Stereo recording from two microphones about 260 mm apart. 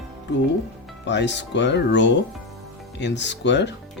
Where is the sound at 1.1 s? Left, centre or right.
Left.